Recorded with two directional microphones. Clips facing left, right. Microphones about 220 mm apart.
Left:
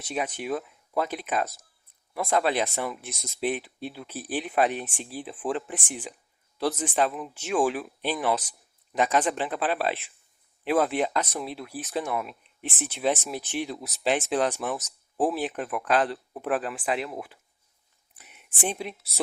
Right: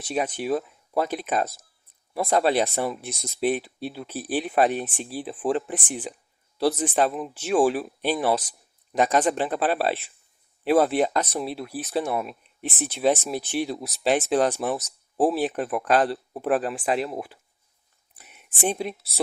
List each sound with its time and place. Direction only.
0.0 s speech: 35° right (ahead or behind)